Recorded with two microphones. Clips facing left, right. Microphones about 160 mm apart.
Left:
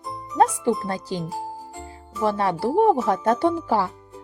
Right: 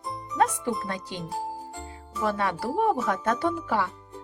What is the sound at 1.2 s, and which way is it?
Speech, centre (ahead or behind).